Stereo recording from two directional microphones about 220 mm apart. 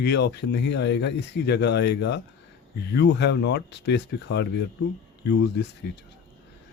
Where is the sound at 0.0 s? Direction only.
50° left (ahead or behind).